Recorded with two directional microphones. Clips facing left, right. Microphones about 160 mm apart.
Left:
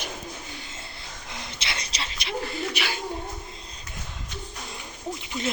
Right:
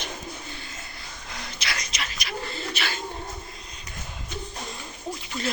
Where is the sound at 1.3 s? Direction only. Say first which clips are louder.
Right 1 dB; 25° left (ahead or behind).